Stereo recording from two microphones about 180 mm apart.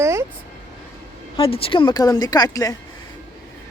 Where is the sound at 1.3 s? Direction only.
30° left (ahead or behind).